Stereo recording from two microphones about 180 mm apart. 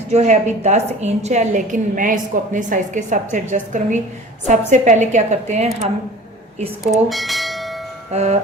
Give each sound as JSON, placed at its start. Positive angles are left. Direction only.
{"t": 0.1, "sound": "a woman's voice", "side_deg": -40}
{"t": 6.8, "sound": "bell", "side_deg": 0}
{"t": 8.1, "sound": "a woman's voice", "side_deg": -40}